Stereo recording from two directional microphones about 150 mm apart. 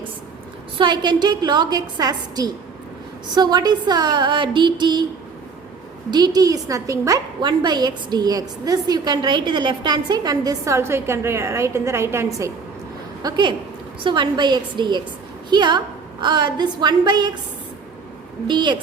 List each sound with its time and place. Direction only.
0.8 s a woman's voice: 30° right (ahead or behind)
6.1 s a woman's voice: 25° right (ahead or behind)
13.2 s a woman's voice: 30° right (ahead or behind)
18.4 s a woman's voice: 30° right (ahead or behind)